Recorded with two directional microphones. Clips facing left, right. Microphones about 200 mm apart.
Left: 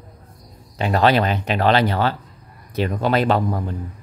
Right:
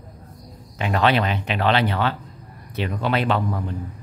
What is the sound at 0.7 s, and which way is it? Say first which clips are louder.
Speech: left 3 dB; 35° left (ahead or behind).